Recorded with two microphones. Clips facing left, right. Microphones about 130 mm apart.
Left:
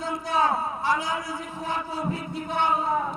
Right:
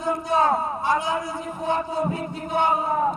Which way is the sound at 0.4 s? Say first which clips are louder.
Right 3 dB; 50° right (ahead or behind).